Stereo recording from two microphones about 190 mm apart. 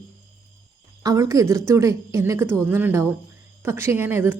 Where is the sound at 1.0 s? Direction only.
20° right (ahead or behind).